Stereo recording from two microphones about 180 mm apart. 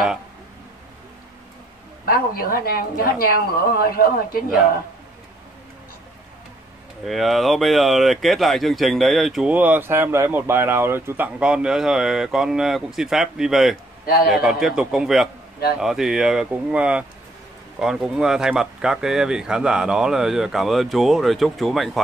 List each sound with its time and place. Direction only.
2.0 s a woman's voice: 55° left (ahead or behind)
7.1 s speech: centre (ahead or behind)